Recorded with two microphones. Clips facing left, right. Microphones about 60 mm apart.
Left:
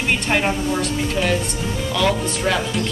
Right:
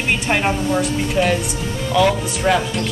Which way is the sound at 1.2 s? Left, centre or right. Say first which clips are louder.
Right 4 dB; centre.